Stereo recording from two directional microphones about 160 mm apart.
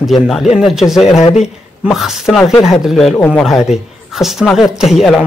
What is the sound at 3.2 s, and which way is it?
Speech, 10° left (ahead or behind).